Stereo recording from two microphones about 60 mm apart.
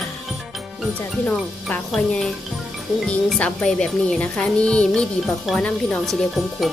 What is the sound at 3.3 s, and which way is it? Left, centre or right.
Speech, left.